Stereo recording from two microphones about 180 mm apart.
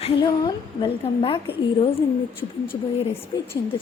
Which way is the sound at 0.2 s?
25° left (ahead or behind).